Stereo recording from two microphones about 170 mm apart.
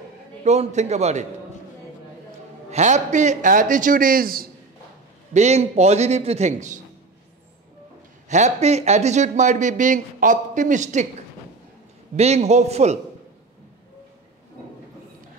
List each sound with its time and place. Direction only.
0.4 s a man's voice: 40° right (ahead or behind)
2.7 s speech: 45° right (ahead or behind)
5.3 s a man's voice: 40° right (ahead or behind)
8.3 s speech: 40° right (ahead or behind)
12.2 s a man's voice: 40° right (ahead or behind)